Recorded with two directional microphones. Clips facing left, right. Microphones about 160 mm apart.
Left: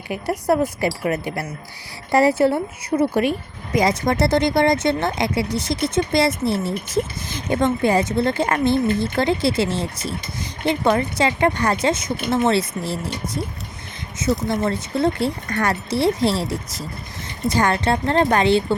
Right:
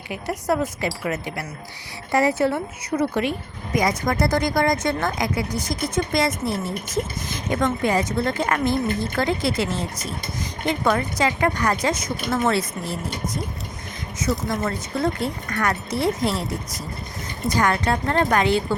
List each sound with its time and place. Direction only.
0.4 s speech: 30° left (ahead or behind)
14.4 s speech: 25° left (ahead or behind)
17.5 s speech: 30° left (ahead or behind)